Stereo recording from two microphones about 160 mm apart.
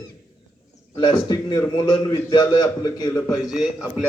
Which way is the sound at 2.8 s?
20° left (ahead or behind).